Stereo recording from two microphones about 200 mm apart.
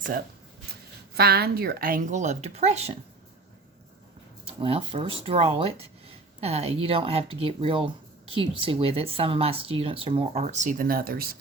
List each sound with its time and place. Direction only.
1.1 s a woman's voice: 50° right (ahead or behind); by 3.0 s 30° right (ahead or behind)
4.4 s speech: 25° right (ahead or behind); by 11.3 s 50° right (ahead or behind)